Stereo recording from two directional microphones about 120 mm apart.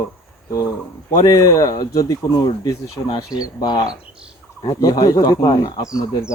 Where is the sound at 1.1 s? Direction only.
30° left (ahead or behind).